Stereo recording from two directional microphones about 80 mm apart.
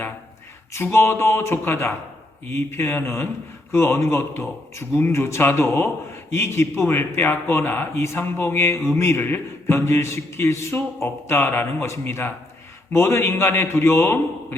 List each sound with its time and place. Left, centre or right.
0.7 s a man's voice: left